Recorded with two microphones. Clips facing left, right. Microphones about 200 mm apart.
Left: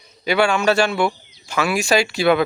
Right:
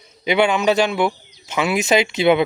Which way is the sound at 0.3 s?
20° right (ahead or behind).